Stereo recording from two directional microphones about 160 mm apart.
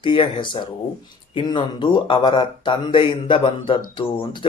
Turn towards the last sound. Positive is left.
turn(degrees=30)  # may be behind; listen again after turning